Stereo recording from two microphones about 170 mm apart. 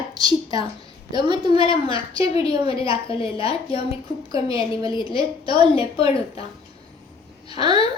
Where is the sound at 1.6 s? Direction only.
30° left (ahead or behind).